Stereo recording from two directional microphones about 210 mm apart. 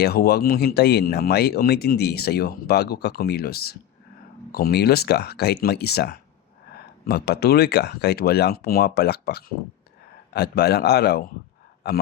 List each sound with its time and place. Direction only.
0.0 s speech: 50° left (ahead or behind)